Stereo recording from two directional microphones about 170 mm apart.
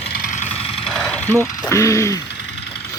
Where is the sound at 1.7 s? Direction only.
20° left (ahead or behind).